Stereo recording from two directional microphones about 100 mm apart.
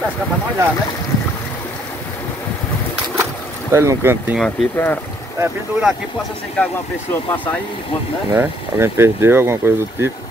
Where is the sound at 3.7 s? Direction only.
30° right (ahead or behind).